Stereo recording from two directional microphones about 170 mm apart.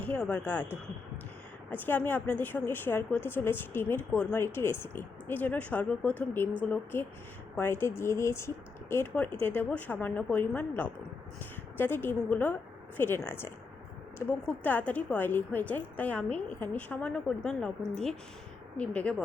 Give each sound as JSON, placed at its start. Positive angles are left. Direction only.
{"t": 0.0, "sound": "a woman's voice", "side_deg": 10}
{"t": 1.7, "sound": "a woman's voice", "side_deg": 10}